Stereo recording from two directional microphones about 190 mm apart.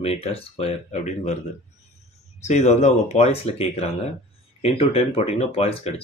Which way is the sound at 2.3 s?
35° left (ahead or behind).